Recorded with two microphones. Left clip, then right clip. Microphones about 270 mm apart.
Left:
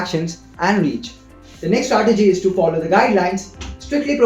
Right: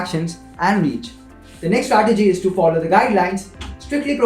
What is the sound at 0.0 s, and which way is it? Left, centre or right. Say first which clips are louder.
Speech: left 2 dB; right.